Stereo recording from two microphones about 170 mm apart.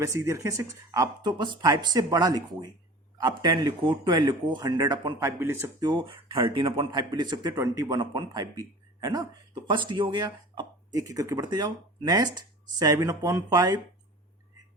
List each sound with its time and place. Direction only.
0.0 s speech: 20° right (ahead or behind)
5.9 s speech: 30° right (ahead or behind)